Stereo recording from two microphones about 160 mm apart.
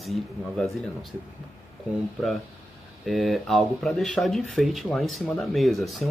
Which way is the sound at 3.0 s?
Centre (ahead or behind).